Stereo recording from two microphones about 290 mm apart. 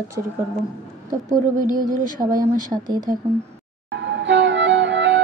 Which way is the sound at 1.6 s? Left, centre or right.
Right.